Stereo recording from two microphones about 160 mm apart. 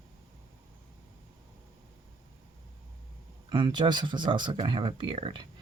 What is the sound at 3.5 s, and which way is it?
Speech, 30° right (ahead or behind).